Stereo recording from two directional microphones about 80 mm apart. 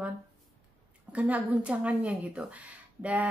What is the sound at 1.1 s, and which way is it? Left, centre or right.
A woman's voice, centre.